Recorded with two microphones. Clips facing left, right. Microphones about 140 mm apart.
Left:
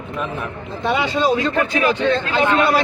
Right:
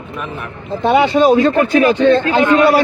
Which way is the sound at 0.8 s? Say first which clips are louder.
Right 7 dB; 45° right (ahead or behind).